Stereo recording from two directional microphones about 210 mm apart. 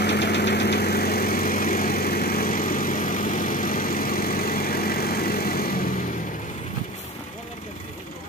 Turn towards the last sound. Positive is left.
turn(degrees=40)  # may be behind; listen again after turning